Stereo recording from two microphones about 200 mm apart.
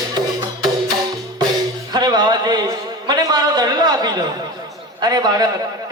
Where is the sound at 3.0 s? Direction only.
20° right (ahead or behind).